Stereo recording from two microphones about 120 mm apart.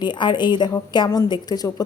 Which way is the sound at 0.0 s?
40° left (ahead or behind).